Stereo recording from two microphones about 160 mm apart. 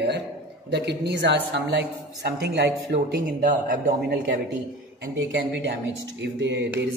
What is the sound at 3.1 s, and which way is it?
Speech, 55° right (ahead or behind).